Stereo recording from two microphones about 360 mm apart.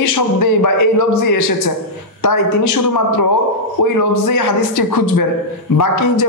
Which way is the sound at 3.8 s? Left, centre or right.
Left.